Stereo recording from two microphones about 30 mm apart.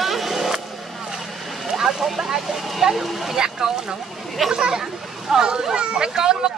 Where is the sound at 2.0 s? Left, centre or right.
Centre.